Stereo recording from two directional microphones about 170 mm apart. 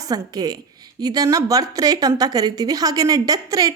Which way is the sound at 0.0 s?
20° right (ahead or behind).